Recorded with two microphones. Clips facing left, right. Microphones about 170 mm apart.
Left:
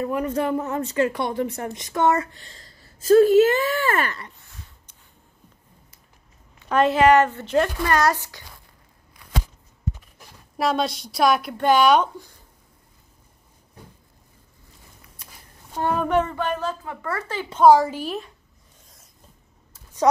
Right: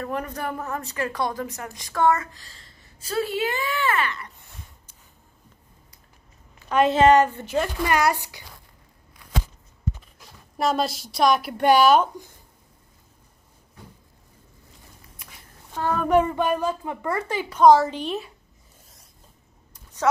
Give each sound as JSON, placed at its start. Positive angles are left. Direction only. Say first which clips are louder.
{"t": 0.3, "sound": "a woman's voice", "louder": "left 6 dB", "side_deg": 25}
{"t": 3.0, "sound": "speech", "louder": "left 12 dB", "side_deg": 45}
{"t": 6.9, "sound": "a woman's voice", "louder": "even", "side_deg": -25}
{"t": 7.2, "sound": "speech", "louder": "left 4 dB", "side_deg": -10}
{"t": 10.6, "sound": "a woman's voice", "louder": "left 1 dB", "side_deg": 0}
{"t": 11.5, "sound": "speech", "louder": "right 2 dB", "side_deg": -10}
{"t": 15.7, "sound": "a child's voice", "louder": "left 2 dB", "side_deg": 20}
{"t": 16.0, "sound": "speech", "louder": "right 5 dB", "side_deg": -10}
{"t": 17.6, "sound": "a woman's voice", "louder": "left 1 dB", "side_deg": 10}
{"t": 19.7, "sound": "a sound", "louder": "left 5 dB", "side_deg": 10}